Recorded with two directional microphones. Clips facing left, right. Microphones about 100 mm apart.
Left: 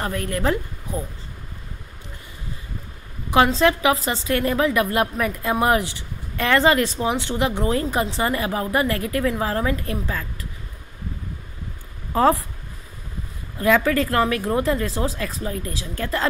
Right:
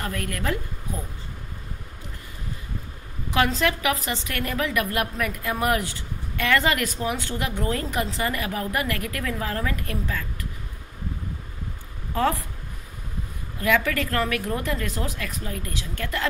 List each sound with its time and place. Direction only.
0.0 s a woman's voice: 25° left (ahead or behind)
3.3 s a woman's voice: 30° left (ahead or behind)
12.1 s a woman's voice: 30° left (ahead or behind)
13.6 s speech: 30° left (ahead or behind)